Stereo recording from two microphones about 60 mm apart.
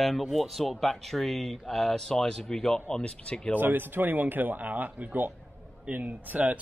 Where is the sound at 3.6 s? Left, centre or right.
Right.